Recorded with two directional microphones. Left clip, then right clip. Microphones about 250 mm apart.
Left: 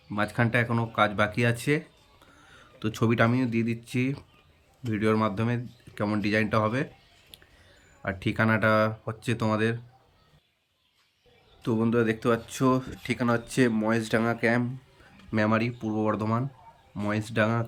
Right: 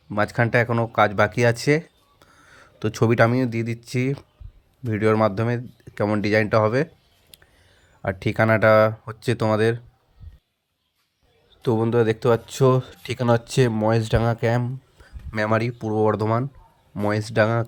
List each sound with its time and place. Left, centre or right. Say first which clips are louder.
0.1 s speech: right 6 dB; centre
7.3 s a sound: right 1 dB; right
8.0 s speech: right 6 dB; centre
11.6 s speech: right 6 dB; centre